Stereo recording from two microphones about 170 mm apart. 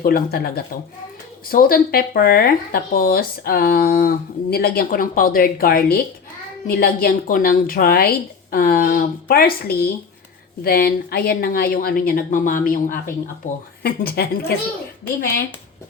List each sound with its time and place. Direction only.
0.0 s speech: 65° left (ahead or behind)